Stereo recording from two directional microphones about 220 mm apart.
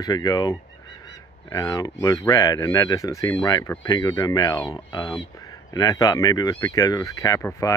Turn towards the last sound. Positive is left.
turn(degrees=15)  # may be behind; listen again after turning